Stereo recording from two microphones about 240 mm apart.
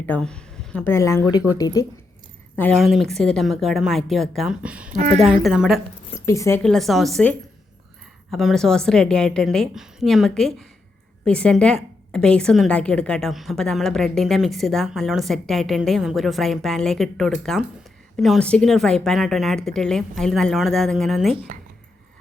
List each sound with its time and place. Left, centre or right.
0.0 s speech: centre
2.6 s a woman's voice: centre
4.9 s a woman's voice: right
5.4 s a woman's voice: centre
6.1 s a woman's voice: centre